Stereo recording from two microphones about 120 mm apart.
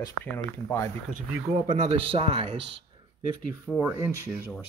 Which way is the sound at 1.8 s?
50° right (ahead or behind).